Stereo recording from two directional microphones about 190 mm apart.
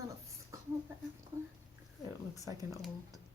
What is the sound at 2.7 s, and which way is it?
Speech, centre (ahead or behind).